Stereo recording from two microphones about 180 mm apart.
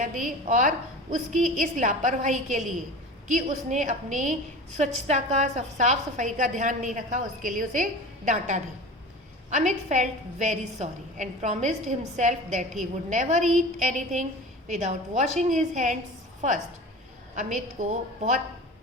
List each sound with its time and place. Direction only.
0.0 s a woman's voice: 50° right (ahead or behind)
17.3 s a woman's voice: 45° right (ahead or behind)